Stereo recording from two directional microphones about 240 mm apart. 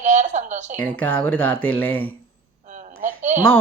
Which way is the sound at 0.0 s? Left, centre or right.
Right.